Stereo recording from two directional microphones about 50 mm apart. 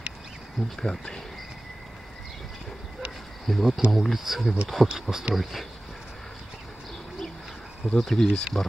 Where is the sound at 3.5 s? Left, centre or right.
Centre.